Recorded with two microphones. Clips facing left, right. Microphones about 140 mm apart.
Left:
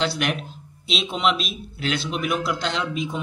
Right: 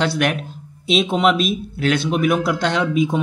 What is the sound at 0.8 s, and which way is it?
A man's voice, 50° right (ahead or behind).